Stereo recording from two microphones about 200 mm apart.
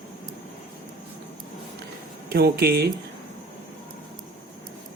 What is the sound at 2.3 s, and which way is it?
Speech, 50° right (ahead or behind).